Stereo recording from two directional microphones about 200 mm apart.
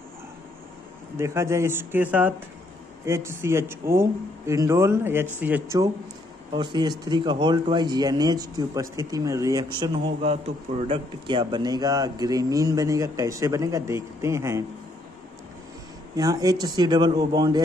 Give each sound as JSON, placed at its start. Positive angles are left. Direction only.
{"t": 1.1, "sound": "a man's voice", "side_deg": -15}
{"t": 6.5, "sound": "speech", "side_deg": -20}
{"t": 16.2, "sound": "speech", "side_deg": -20}